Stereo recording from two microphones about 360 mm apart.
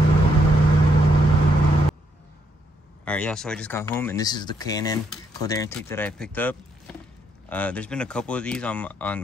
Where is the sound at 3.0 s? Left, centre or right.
Centre.